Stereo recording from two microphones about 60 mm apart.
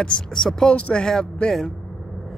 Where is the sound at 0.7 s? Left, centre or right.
Centre.